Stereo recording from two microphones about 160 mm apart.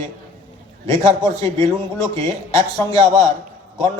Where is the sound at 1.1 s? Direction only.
20° left (ahead or behind).